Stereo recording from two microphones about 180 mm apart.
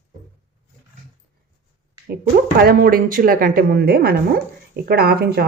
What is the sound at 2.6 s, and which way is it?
Speech, 55° right (ahead or behind).